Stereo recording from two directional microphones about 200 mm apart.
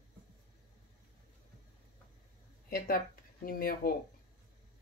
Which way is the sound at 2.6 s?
45° left (ahead or behind).